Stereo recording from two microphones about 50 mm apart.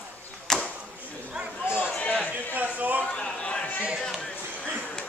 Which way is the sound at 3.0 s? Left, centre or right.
Left.